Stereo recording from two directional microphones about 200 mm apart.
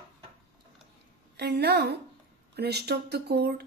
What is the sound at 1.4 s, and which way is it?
Speech, 55° right (ahead or behind).